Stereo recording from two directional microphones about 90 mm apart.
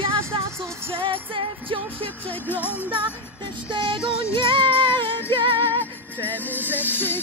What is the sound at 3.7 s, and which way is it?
Music, 75° right (ahead or behind).